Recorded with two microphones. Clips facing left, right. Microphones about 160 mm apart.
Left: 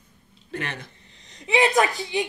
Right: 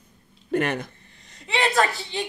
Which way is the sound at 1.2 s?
15° left (ahead or behind).